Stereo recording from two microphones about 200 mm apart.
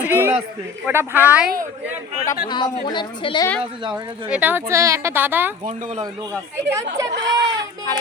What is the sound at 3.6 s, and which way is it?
Speech, 25° right (ahead or behind).